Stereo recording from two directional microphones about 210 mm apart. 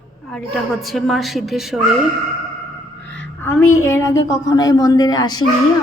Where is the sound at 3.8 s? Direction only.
15° left (ahead or behind).